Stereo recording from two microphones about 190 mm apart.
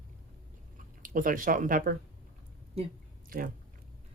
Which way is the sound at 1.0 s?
45° right (ahead or behind).